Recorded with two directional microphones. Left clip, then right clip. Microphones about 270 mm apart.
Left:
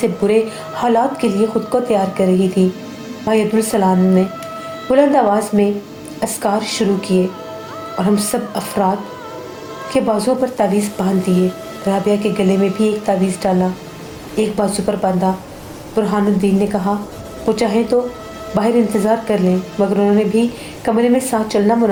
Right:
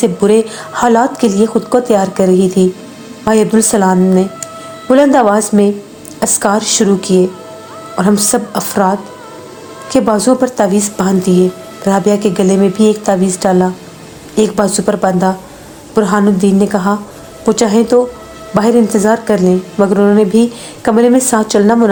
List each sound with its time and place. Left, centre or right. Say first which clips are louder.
0.0 s a woman's voice: right 5 dB; right